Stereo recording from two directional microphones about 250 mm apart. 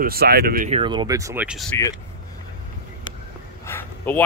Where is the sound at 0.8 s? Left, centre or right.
Centre.